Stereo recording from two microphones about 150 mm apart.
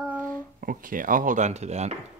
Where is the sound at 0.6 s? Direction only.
70° right (ahead or behind); by 1.9 s 50° right (ahead or behind).